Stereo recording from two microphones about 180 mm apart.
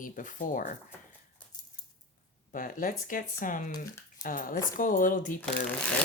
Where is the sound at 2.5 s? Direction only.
50° left (ahead or behind).